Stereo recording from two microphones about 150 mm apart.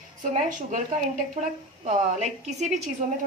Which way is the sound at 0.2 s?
60° right (ahead or behind).